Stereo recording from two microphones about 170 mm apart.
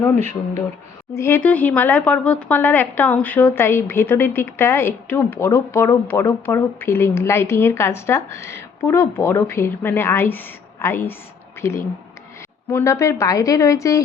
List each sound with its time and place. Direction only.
0.0 s a woman's voice: 15° left (ahead or behind)